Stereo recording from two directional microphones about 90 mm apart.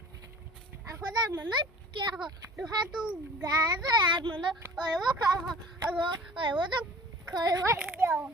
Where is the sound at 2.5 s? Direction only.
5° right (ahead or behind).